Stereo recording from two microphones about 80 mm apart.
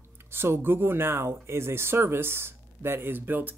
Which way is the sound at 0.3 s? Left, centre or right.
Right.